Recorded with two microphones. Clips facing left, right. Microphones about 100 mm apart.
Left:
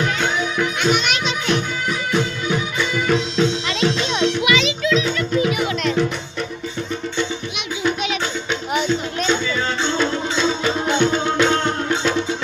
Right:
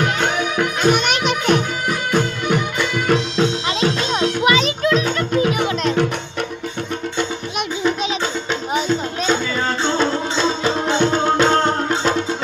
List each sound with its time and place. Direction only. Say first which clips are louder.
0.0 s music: right 2 dB; 60° right (ahead or behind); by 5.9 s 40° right (ahead or behind)
8.7 s music: even; 40° right (ahead or behind)